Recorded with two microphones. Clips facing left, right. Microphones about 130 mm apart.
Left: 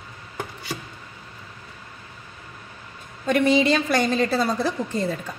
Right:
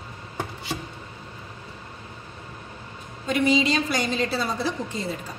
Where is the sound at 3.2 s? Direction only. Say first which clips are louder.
Left 3 dB; 55° left (ahead or behind).